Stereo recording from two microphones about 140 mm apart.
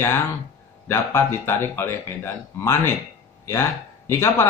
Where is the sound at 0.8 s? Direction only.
20° left (ahead or behind).